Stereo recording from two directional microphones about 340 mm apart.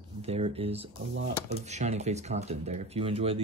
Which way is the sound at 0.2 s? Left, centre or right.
Centre.